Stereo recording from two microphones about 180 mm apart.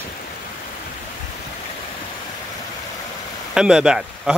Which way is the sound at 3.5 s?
5° right (ahead or behind).